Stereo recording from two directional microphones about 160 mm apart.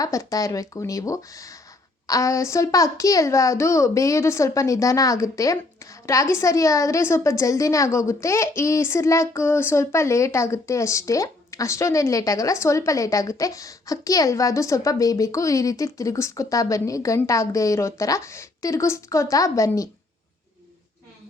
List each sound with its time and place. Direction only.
0.0 s a child's voice: 20° left (ahead or behind)